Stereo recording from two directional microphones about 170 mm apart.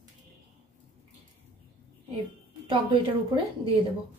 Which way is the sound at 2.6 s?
25° right (ahead or behind).